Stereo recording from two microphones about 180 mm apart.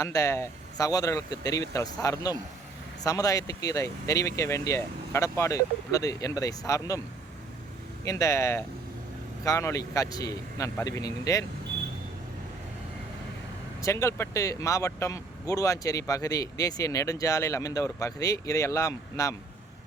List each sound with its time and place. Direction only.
0.0 s speech: 15° left (ahead or behind)
8.0 s speech: 15° left (ahead or behind)
13.8 s speech: 15° left (ahead or behind)